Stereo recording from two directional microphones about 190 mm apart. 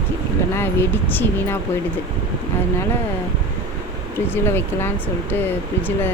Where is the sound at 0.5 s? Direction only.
10° left (ahead or behind).